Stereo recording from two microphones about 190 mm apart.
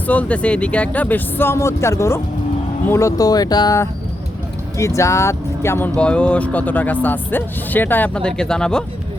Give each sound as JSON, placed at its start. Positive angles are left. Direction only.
{"t": 0.1, "sound": "speech", "side_deg": 5}
{"t": 4.9, "sound": "speech", "side_deg": 15}